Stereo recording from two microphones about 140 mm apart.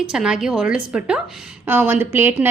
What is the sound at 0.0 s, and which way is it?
A woman's voice, 5° right (ahead or behind).